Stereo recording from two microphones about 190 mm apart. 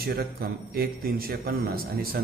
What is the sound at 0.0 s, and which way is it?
A man's voice, 55° right (ahead or behind).